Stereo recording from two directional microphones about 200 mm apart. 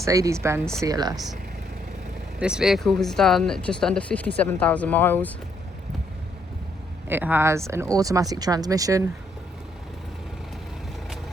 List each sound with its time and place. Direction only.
0.0 s speech: 15° right (ahead or behind)
2.4 s speech: 5° right (ahead or behind)
7.1 s speech: 10° right (ahead or behind)